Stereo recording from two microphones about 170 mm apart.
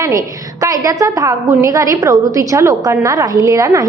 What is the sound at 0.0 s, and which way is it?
A woman's voice, 20° right (ahead or behind).